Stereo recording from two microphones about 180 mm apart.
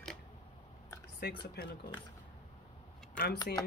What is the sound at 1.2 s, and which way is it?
Speech, 60° left (ahead or behind).